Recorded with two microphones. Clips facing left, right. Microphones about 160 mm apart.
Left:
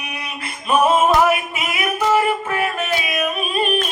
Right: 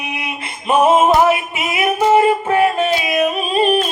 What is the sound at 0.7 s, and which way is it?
Singing, 25° right (ahead or behind).